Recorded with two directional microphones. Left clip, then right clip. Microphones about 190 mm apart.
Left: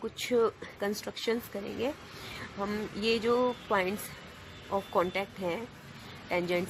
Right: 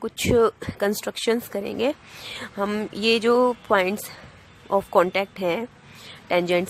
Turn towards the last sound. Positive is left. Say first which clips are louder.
# right 9 dB
turn(degrees=-35)  # may be behind; listen again after turning